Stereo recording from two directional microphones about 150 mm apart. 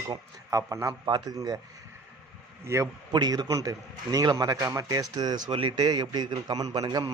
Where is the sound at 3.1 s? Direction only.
30° right (ahead or behind).